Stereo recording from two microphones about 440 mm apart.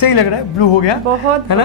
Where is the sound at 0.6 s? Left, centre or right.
Left.